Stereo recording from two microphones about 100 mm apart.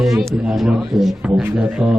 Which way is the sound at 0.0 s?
Centre (ahead or behind).